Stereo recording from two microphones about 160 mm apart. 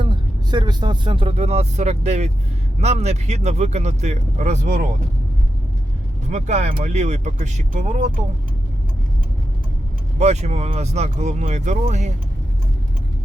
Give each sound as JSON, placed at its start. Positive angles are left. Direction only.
{"t": 0.0, "sound": "speech", "side_deg": -30}
{"t": 6.3, "sound": "speech", "side_deg": -45}
{"t": 10.2, "sound": "speech", "side_deg": -45}